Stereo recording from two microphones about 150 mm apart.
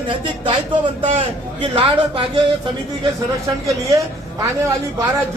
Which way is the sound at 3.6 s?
20° right (ahead or behind).